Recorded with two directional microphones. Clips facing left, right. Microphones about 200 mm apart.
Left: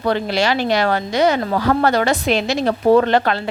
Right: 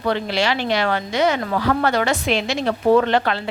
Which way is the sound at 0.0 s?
40° left (ahead or behind).